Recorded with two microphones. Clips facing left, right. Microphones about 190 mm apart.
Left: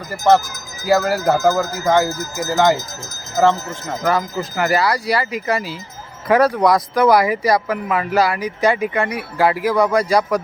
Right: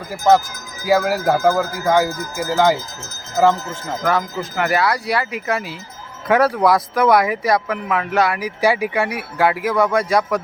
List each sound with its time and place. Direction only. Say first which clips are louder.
0.1 s speech: even; 15° right (ahead or behind)